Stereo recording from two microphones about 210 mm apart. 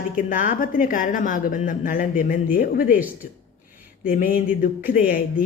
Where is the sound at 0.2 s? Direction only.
40° left (ahead or behind).